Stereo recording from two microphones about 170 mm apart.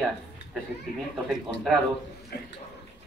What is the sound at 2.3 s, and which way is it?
Speech, 70° left (ahead or behind).